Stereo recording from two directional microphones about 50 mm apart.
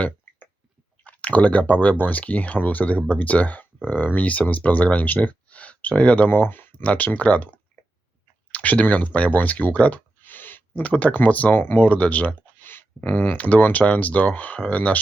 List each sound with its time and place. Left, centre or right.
1.0 s speech: left
6.3 s speech: left
6.8 s speech: left
10.8 s speech: left
11.5 s speech: left
11.9 s speech: left
12.5 s a sound: left
13.0 s speech: left